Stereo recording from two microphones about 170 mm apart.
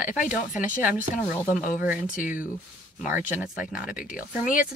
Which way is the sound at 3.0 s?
10° right (ahead or behind).